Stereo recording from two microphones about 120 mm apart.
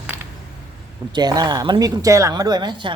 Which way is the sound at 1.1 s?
35° right (ahead or behind).